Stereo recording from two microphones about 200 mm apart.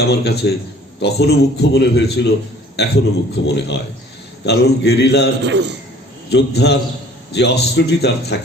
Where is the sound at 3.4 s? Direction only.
60° left (ahead or behind).